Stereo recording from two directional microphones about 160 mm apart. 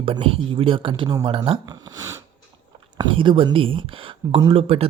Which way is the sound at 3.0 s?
35° right (ahead or behind).